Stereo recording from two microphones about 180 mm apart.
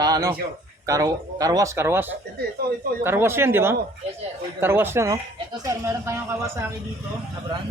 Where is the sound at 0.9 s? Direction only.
20° right (ahead or behind).